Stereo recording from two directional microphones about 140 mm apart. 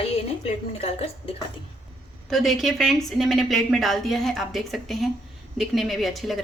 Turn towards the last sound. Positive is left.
turn(degrees=0)  # may be behind; listen again after turning